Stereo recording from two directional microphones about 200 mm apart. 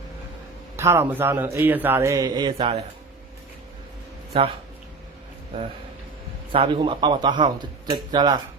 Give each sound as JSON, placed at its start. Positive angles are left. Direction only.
{"t": 0.8, "sound": "speech", "side_deg": -15}
{"t": 6.5, "sound": "speech", "side_deg": -25}